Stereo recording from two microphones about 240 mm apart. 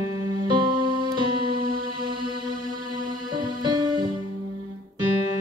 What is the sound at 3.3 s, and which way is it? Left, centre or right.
Music, centre.